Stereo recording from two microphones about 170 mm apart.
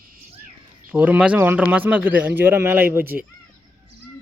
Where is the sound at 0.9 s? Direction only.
10° right (ahead or behind).